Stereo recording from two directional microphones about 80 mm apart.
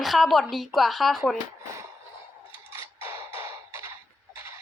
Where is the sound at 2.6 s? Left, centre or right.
Right.